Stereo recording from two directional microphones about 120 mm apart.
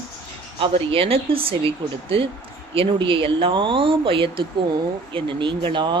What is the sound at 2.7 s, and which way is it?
Speech, 50° right (ahead or behind).